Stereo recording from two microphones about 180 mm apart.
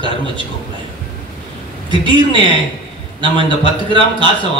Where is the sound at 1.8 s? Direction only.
25° right (ahead or behind).